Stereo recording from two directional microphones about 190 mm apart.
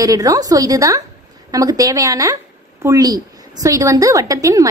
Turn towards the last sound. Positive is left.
turn(degrees=-20)  # may be behind; listen again after turning